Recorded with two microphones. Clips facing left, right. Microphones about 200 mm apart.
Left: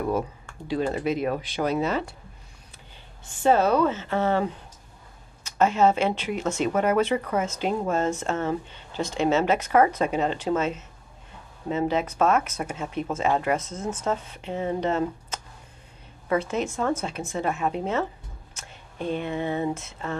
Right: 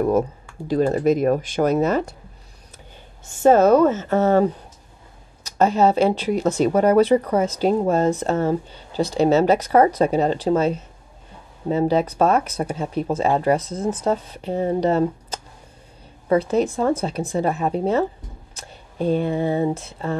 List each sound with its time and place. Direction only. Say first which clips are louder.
0.7 s speech: right 7 dB; 45° right (ahead or behind)
3.3 s speech: right 7 dB; 45° right (ahead or behind)